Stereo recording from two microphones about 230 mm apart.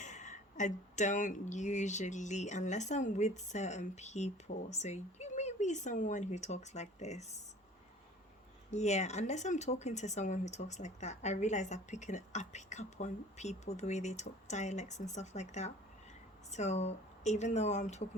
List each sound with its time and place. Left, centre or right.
0.0 s speech: left
8.7 s speech: left